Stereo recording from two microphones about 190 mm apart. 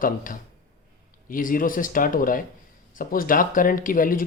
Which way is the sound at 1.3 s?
45° left (ahead or behind).